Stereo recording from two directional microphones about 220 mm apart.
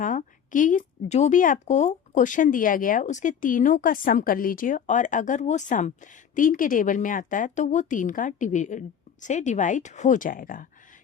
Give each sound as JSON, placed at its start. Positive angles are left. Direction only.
{"t": 0.0, "sound": "speech", "side_deg": 35}